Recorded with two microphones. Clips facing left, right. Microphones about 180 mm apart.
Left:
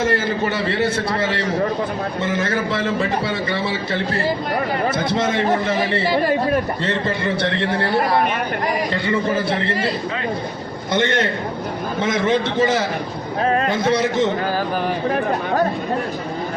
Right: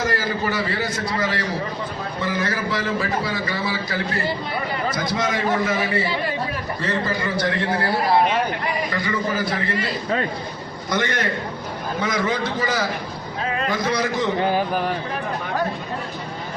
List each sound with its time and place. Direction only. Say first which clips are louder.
0.0 s a man's voice: left 4 dB; 25° left (ahead or behind)
8.9 s a man's voice: left 4 dB; 25° left (ahead or behind)
10.9 s a man's voice: left 4 dB; 25° left (ahead or behind)